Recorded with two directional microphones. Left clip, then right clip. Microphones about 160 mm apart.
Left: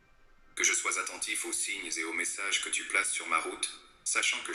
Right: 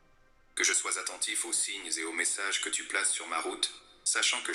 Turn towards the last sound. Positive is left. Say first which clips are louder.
# right 1 dB
turn(degrees=-30)  # may be behind; listen again after turning